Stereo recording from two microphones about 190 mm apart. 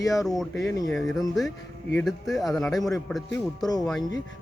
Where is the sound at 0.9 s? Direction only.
Centre (ahead or behind).